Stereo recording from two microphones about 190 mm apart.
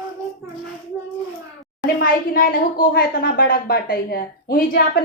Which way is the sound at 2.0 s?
50° left (ahead or behind).